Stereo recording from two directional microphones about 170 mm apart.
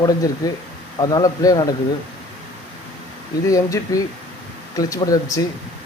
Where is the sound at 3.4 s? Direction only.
20° left (ahead or behind).